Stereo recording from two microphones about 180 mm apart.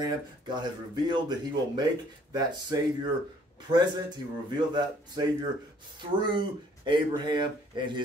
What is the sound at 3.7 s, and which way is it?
Speech, 25° right (ahead or behind).